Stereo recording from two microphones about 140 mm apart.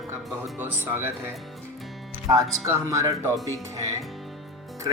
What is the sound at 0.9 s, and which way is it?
Speech, 15° right (ahead or behind).